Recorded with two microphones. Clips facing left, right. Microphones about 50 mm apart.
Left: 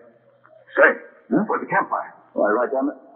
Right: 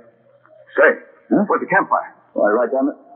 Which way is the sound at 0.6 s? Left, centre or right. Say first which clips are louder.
Right 2 dB; centre.